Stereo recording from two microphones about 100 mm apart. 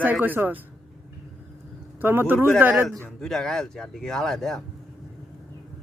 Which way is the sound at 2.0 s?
20° right (ahead or behind).